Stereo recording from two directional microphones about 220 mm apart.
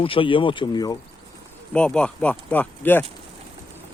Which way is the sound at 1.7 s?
5° left (ahead or behind).